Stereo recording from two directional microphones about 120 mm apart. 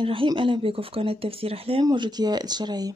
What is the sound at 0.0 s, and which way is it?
Speech, 45° right (ahead or behind).